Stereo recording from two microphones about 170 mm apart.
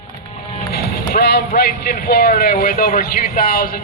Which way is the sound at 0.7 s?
70° left (ahead or behind).